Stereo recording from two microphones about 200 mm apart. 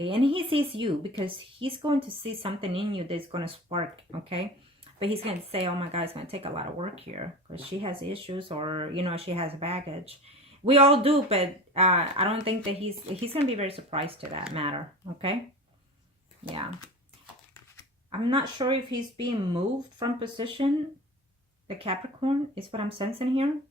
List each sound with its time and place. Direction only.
0.0 s speech: 25° right (ahead or behind)
18.1 s speech: 25° right (ahead or behind)
21.8 s speech: 30° right (ahead or behind)